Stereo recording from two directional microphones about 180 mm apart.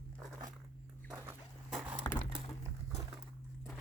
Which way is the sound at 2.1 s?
20° left (ahead or behind).